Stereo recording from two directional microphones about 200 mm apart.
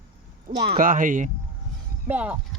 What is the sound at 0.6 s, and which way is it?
Speech, 50° right (ahead or behind).